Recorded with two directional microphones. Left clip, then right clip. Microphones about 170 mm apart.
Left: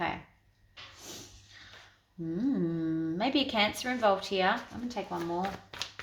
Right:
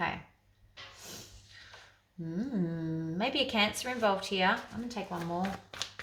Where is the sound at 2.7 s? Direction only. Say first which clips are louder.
Left 5 dB; 30° left (ahead or behind).